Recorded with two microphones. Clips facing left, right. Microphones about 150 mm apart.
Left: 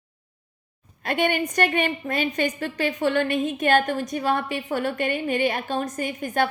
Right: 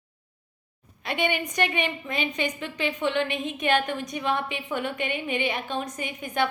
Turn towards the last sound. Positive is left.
turn(degrees=45)  # may be behind; listen again after turning